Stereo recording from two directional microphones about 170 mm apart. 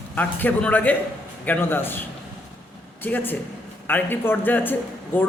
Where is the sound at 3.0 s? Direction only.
10° left (ahead or behind).